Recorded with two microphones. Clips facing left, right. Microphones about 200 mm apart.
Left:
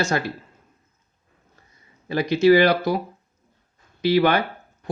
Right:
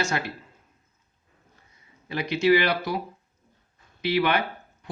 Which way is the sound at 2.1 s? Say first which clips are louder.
Left 5 dB; 40° left (ahead or behind).